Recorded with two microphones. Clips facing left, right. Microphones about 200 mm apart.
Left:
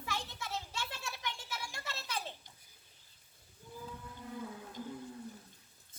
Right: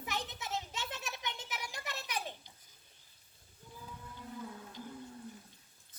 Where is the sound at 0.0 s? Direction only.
20° right (ahead or behind).